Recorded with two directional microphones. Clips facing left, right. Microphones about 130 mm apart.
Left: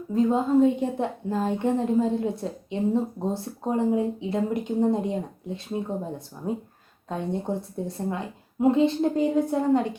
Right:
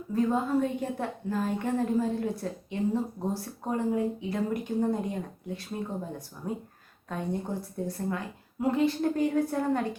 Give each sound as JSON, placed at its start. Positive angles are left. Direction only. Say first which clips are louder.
{"t": 0.1, "sound": "a woman's voice", "louder": "left 5 dB", "side_deg": 20}
{"t": 6.4, "sound": "a woman's voice", "louder": "left 5 dB", "side_deg": 20}